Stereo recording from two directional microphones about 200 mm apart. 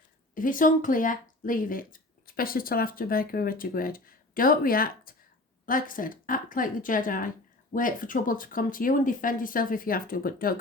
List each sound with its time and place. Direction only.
0.3 s speech: 40° left (ahead or behind)